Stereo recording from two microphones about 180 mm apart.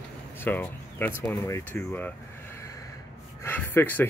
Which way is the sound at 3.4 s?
10° left (ahead or behind).